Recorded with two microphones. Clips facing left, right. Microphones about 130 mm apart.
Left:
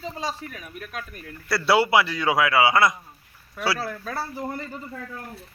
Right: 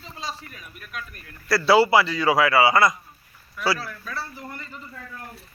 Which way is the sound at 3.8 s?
45° left (ahead or behind).